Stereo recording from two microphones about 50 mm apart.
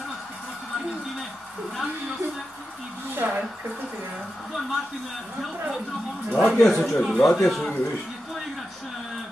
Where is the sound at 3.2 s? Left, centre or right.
Right.